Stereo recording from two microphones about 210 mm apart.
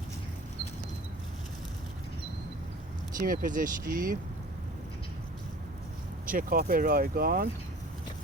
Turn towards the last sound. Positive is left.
turn(degrees=-45)  # may be behind; listen again after turning